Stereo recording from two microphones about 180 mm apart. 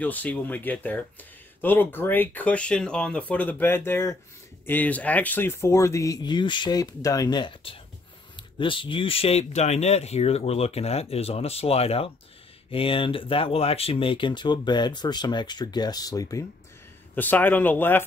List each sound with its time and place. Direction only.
0.0 s speech: 10° left (ahead or behind)